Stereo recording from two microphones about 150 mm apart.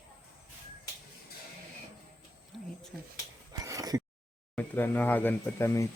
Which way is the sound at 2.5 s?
Centre (ahead or behind).